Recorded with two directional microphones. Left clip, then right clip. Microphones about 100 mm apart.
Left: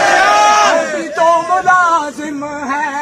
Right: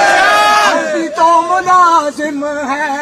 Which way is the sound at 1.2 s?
45° left (ahead or behind).